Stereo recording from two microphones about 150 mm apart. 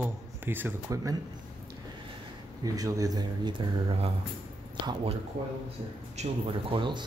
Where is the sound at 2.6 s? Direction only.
25° right (ahead or behind).